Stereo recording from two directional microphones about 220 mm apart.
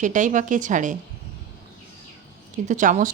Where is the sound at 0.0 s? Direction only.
35° right (ahead or behind).